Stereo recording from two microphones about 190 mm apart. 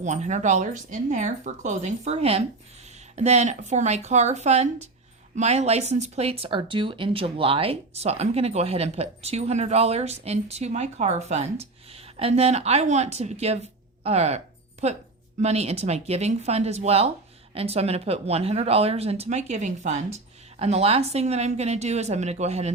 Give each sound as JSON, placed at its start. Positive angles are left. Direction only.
{"t": 0.0, "sound": "speech", "side_deg": -40}
{"t": 14.0, "sound": "a sound", "side_deg": -35}
{"t": 15.4, "sound": "speech", "side_deg": -35}